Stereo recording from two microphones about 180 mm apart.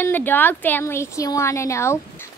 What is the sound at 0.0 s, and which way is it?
A woman's voice, 10° left (ahead or behind).